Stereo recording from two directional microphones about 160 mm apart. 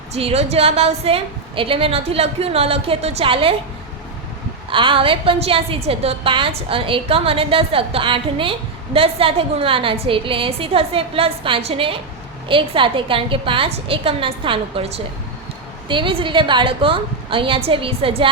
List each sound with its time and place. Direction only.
0.1 s a woman's voice: 40° right (ahead or behind)
4.7 s a woman's voice: 30° right (ahead or behind)